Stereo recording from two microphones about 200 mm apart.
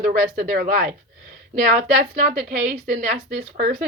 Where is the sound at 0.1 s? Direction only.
45° right (ahead or behind).